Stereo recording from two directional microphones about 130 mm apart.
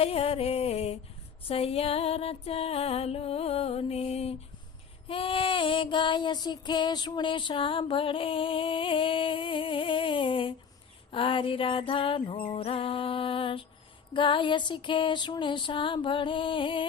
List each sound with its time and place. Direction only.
0.0 s music: 50° left (ahead or behind)
5.0 s female singing: 45° left (ahead or behind)
12.5 s music: 45° left (ahead or behind)
14.1 s female singing: 40° left (ahead or behind)